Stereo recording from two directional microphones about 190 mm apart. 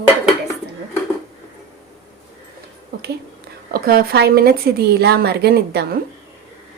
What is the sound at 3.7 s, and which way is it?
A woman's voice, 55° right (ahead or behind).